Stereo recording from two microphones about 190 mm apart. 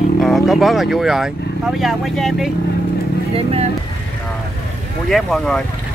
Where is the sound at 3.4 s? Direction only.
30° right (ahead or behind).